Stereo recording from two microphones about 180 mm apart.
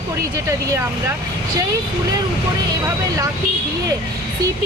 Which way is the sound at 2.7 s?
20° right (ahead or behind).